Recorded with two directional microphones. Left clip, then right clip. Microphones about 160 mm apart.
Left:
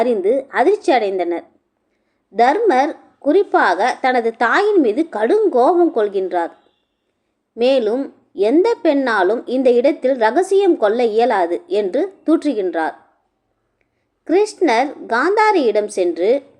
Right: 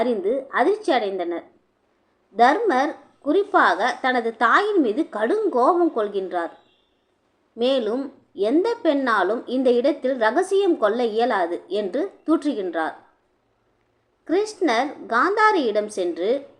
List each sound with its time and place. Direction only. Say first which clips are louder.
0.0 s a woman's voice: left 6 dB; 30° left (ahead or behind)
7.5 s a woman's voice: left 6 dB; 25° left (ahead or behind)
14.3 s a woman's voice: left 6 dB; 25° left (ahead or behind)